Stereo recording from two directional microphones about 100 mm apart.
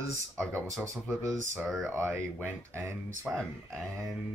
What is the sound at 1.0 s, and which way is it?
Speech, 25° right (ahead or behind).